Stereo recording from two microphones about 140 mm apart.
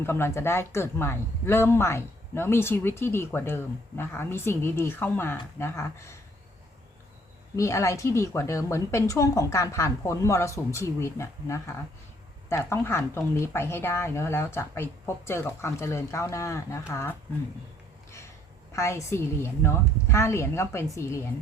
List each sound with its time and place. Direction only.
0.0 s a man's voice: 15° left (ahead or behind)
7.5 s speech: 20° left (ahead or behind)
18.7 s speech: 20° left (ahead or behind)